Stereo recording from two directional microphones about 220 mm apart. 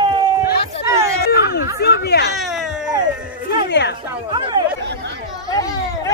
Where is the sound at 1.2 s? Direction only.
45° left (ahead or behind).